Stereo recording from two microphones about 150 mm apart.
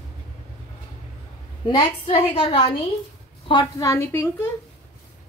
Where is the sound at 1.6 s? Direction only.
35° left (ahead or behind).